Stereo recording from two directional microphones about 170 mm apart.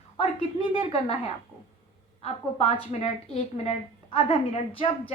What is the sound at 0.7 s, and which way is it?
A woman's voice, 35° left (ahead or behind).